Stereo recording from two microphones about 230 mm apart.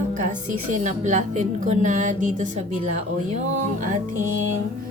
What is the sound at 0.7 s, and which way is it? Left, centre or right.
Speech, right.